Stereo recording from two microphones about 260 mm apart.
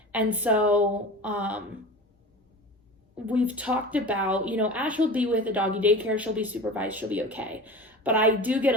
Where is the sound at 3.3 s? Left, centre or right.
Centre.